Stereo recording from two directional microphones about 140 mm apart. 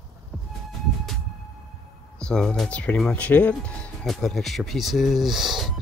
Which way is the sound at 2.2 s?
5° left (ahead or behind).